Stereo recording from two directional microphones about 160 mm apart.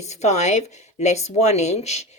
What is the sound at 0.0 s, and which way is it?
Speech, 45° left (ahead or behind).